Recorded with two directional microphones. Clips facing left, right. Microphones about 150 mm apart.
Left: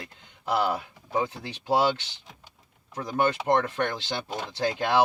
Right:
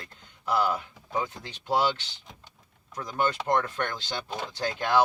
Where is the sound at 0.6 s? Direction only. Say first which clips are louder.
Even; 20° left (ahead or behind).